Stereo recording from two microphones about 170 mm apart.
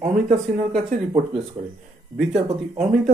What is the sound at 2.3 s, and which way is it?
Speech, 40° right (ahead or behind).